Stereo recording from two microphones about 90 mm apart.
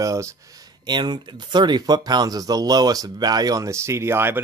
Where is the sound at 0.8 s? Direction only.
55° right (ahead or behind).